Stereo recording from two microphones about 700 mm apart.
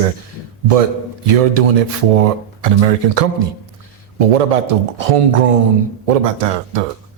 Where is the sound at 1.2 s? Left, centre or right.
Right.